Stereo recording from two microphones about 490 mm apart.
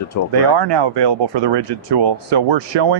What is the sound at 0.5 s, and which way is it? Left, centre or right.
Speech, right.